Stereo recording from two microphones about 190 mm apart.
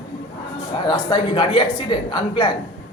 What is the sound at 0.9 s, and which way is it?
Speech, 25° left (ahead or behind).